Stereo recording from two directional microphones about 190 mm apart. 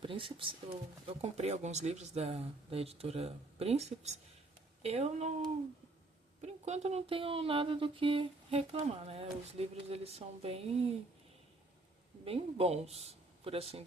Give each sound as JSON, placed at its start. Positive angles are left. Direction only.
{"t": 0.0, "sound": "speech", "side_deg": -25}
{"t": 6.4, "sound": "speech", "side_deg": -35}
{"t": 12.2, "sound": "speech", "side_deg": -30}